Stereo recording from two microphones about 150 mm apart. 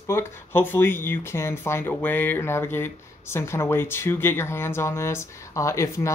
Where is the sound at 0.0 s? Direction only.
15° left (ahead or behind).